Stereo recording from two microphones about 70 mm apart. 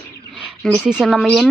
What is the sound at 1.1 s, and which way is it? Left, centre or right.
Speech, centre.